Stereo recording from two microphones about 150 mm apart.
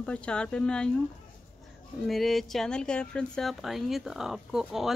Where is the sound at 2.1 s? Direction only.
Centre (ahead or behind).